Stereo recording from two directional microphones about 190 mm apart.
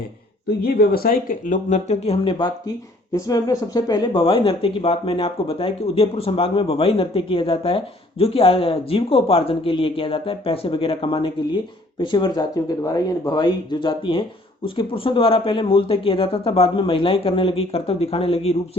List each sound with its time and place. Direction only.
0.4 s speech: 55° left (ahead or behind); by 18.8 s 30° left (ahead or behind)